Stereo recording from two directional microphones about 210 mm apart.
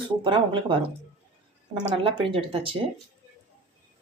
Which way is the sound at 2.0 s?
25° right (ahead or behind).